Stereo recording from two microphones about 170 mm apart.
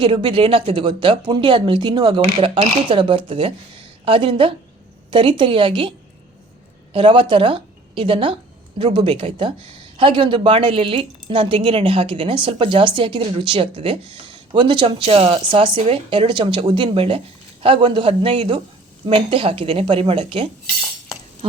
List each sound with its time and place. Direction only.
0.0 s speech: 30° right (ahead or behind)
6.9 s a woman's voice: 30° right (ahead or behind)